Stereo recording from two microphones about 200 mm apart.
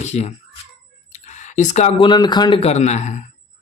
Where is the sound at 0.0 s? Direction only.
35° left (ahead or behind).